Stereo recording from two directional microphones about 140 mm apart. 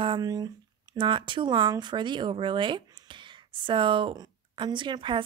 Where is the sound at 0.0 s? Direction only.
30° right (ahead or behind).